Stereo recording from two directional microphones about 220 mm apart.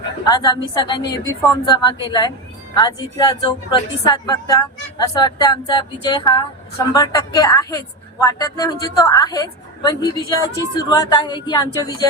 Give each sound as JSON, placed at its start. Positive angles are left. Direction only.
{"t": 0.3, "sound": "a woman's voice", "side_deg": 20}